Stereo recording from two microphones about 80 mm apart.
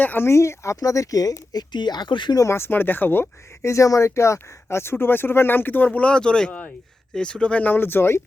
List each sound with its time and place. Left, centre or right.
0.0 s speech: left
0.3 s speech: left
1.7 s speech: left
2.5 s speech: left
3.7 s speech: left